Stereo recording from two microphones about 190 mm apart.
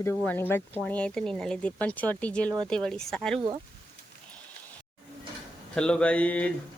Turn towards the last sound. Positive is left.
turn(degrees=5)  # may be behind; listen again after turning